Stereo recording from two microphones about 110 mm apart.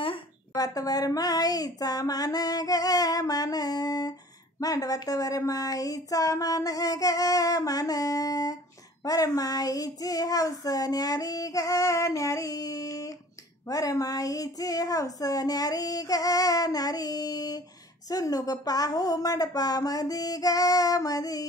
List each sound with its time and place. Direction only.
0.6 s child singing: 35° left (ahead or behind)